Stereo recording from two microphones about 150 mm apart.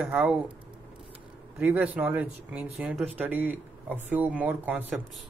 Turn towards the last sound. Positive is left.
turn(degrees=-10)  # may be behind; listen again after turning